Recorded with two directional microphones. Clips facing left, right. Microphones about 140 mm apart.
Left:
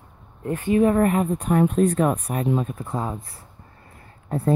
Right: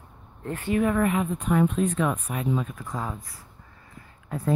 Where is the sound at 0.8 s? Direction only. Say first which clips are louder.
Left 5 dB; 40° left (ahead or behind).